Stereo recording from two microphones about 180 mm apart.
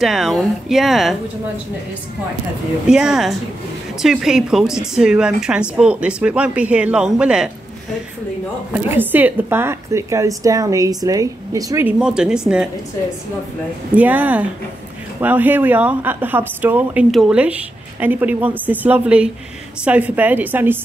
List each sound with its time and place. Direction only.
0.0 s a woman's voice: centre (ahead or behind)
2.9 s a woman's voice: 5° right (ahead or behind)
8.9 s a woman's voice: 10° right (ahead or behind)
12.0 s a woman's voice: 5° right (ahead or behind)
13.9 s a woman's voice: 10° right (ahead or behind)